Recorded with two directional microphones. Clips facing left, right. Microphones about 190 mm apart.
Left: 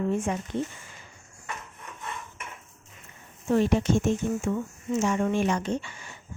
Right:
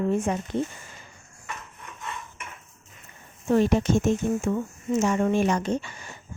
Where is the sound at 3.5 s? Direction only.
40° right (ahead or behind).